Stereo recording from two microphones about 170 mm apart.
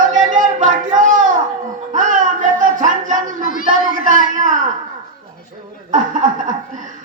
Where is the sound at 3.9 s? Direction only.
50° right (ahead or behind).